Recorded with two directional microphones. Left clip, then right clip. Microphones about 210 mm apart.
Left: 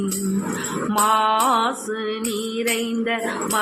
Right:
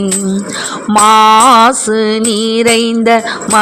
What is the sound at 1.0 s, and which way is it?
Music, 45° right (ahead or behind).